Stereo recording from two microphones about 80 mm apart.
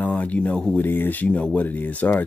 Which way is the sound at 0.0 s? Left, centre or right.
Left.